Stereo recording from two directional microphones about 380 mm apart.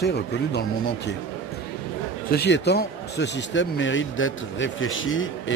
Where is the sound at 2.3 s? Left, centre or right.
Left.